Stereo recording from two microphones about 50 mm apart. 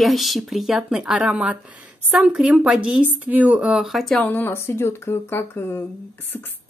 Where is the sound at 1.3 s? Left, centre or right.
Right.